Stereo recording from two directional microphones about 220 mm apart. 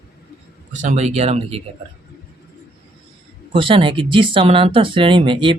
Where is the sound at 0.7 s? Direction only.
35° right (ahead or behind).